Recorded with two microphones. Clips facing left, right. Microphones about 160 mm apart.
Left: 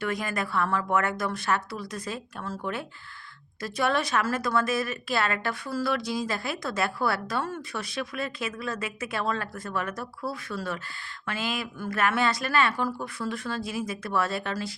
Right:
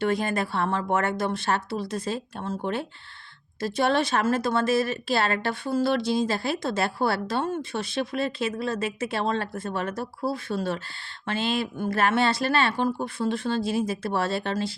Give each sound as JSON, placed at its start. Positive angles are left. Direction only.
{"t": 0.0, "sound": "a woman's voice", "side_deg": -30}